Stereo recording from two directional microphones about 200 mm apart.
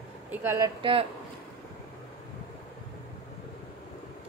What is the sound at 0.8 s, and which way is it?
Speech, 25° right (ahead or behind).